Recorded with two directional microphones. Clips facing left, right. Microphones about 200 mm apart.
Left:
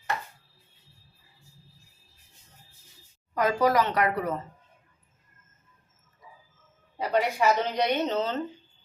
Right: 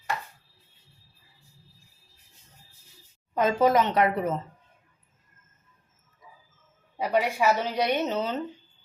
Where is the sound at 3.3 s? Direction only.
25° right (ahead or behind).